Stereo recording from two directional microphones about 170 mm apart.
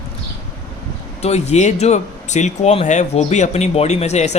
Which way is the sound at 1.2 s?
40° left (ahead or behind).